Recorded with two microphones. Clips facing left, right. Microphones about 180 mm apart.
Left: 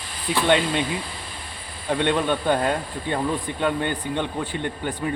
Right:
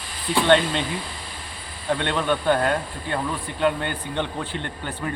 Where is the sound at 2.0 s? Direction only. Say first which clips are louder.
Left 4 dB; 15° left (ahead or behind).